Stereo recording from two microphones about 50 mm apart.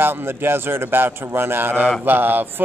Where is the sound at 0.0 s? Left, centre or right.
Right.